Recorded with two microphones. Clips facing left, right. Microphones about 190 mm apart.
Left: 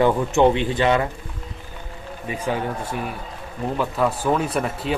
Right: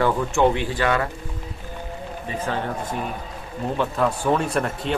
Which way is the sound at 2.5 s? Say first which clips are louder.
Left 3 dB; 15° left (ahead or behind).